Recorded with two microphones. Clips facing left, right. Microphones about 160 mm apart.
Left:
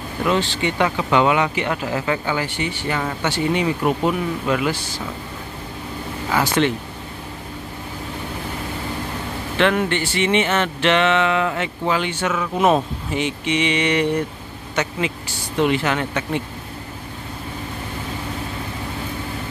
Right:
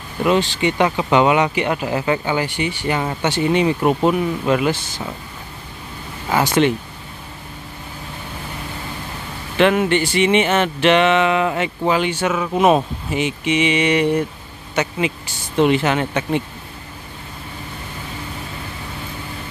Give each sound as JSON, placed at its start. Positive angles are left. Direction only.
{"t": 0.3, "sound": "speech", "side_deg": -15}
{"t": 6.3, "sound": "speech", "side_deg": -20}
{"t": 9.6, "sound": "speech", "side_deg": -15}